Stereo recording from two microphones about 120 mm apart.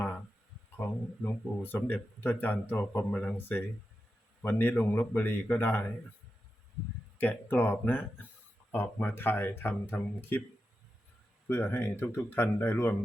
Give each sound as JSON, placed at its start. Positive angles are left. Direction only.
{"t": 0.8, "sound": "speech", "side_deg": 15}
{"t": 7.2, "sound": "speech", "side_deg": 15}
{"t": 11.4, "sound": "speech", "side_deg": 20}